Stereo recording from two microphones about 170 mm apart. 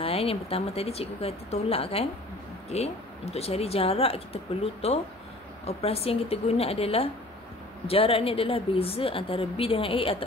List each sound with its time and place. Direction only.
0.0 s a woman's voice: 35° left (ahead or behind)